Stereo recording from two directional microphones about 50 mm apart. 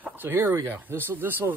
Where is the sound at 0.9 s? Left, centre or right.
Right.